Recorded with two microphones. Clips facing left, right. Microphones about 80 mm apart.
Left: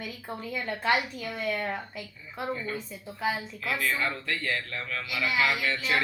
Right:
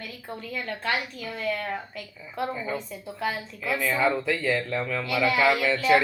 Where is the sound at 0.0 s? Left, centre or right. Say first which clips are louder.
Left 1 dB; centre.